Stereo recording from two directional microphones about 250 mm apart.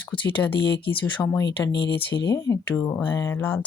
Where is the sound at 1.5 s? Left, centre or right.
Left.